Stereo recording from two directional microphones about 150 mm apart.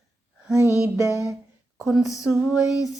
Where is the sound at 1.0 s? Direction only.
20° left (ahead or behind).